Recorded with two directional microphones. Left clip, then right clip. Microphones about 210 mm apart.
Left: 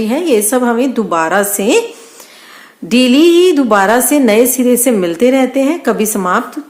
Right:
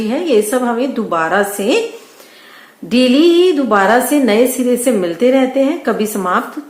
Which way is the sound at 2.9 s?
40° left (ahead or behind).